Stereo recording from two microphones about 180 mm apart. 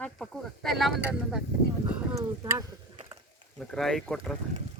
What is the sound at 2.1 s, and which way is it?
Speech, 20° right (ahead or behind).